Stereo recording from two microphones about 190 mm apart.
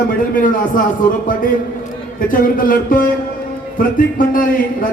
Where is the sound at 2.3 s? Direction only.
45° left (ahead or behind).